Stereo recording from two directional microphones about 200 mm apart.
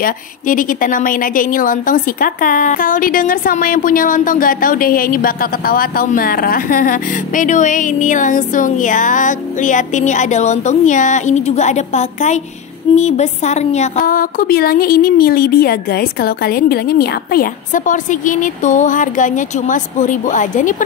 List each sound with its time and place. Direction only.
0.0 s a woman's voice: 40° left (ahead or behind)